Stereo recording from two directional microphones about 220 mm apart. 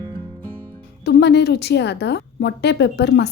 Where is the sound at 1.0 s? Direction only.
50° left (ahead or behind).